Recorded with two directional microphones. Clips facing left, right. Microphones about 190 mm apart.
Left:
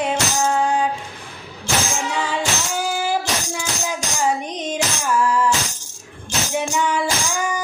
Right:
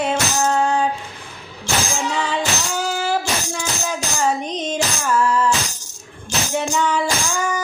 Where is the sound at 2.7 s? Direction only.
15° left (ahead or behind).